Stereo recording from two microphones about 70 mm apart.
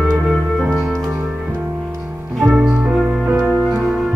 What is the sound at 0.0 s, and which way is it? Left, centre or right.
Music, centre.